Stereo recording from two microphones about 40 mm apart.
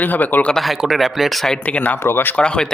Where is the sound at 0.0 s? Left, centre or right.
Left.